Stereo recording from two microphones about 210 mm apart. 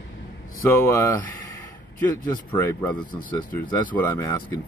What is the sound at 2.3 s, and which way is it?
Speech, 15° left (ahead or behind).